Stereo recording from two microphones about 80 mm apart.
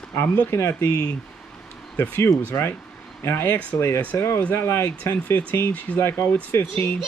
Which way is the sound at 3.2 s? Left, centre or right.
Left.